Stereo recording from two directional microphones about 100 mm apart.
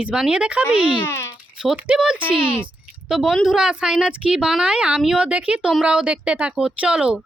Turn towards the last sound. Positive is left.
turn(degrees=-10)  # may be behind; listen again after turning